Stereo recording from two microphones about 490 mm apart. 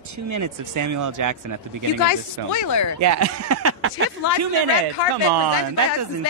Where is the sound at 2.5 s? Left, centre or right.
Left.